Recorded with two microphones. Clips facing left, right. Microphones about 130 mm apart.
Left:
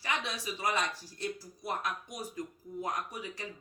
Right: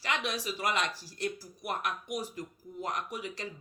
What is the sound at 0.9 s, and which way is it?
Speech, 90° right.